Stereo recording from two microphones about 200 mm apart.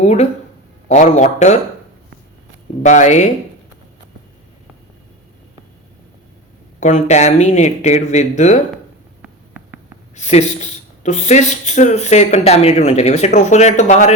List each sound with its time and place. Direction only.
0.0 s speech: 35° left (ahead or behind)
2.8 s speech: 35° left (ahead or behind)
6.7 s speech: 35° left (ahead or behind)
9.2 s hum: 10° right (ahead or behind)
10.2 s speech: 35° left (ahead or behind)